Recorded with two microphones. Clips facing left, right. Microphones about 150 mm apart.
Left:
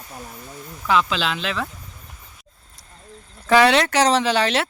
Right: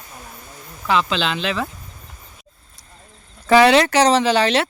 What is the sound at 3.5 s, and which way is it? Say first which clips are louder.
Speech: right 3 dB; centre (ahead or behind).